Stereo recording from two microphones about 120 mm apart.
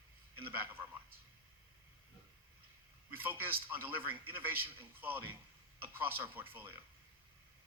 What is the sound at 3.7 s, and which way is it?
A man's voice, 15° right (ahead or behind).